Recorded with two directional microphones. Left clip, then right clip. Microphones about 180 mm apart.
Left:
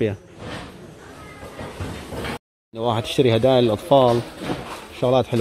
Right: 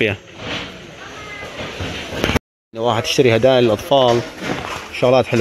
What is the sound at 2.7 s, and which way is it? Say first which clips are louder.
Speech: right 5 dB; 15° left (ahead or behind).